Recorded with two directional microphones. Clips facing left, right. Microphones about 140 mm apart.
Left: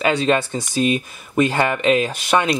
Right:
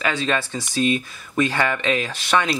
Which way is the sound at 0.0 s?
25° left (ahead or behind).